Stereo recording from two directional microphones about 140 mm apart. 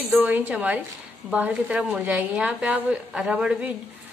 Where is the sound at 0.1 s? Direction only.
10° right (ahead or behind).